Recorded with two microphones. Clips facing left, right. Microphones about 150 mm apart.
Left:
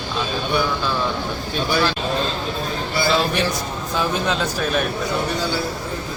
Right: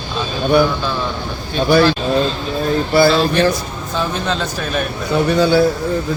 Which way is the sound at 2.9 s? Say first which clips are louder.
Right 9 dB; 65° right (ahead or behind).